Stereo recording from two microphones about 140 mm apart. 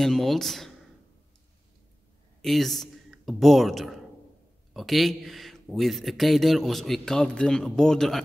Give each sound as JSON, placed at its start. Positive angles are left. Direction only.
{"t": 0.0, "sound": "speech", "side_deg": 0}
{"t": 2.4, "sound": "speech", "side_deg": 0}